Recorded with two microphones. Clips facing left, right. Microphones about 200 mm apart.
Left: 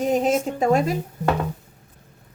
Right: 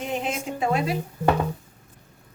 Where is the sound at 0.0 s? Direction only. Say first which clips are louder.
Left 8 dB; 40° left (ahead or behind).